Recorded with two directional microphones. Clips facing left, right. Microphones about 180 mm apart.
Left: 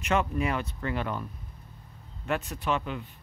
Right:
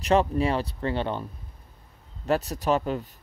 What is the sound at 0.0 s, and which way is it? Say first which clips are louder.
Speech: right 5 dB; 35° right (ahead or behind).